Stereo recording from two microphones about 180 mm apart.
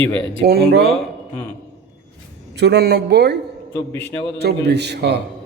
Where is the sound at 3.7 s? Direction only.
10° left (ahead or behind).